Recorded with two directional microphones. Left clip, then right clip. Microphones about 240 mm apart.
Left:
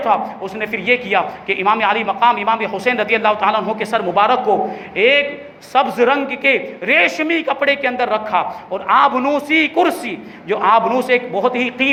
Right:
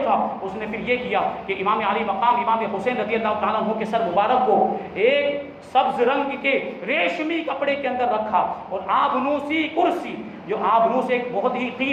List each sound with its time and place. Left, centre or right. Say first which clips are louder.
0.0 s a man's voice: left 4 dB; left